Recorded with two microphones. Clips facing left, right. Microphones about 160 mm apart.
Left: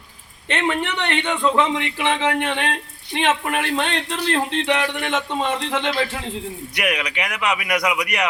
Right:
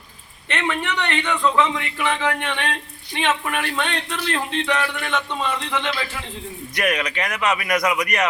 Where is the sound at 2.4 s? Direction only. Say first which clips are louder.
Left 3 dB; 40° left (ahead or behind).